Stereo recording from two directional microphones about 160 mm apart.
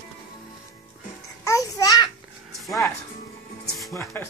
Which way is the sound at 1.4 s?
20° left (ahead or behind).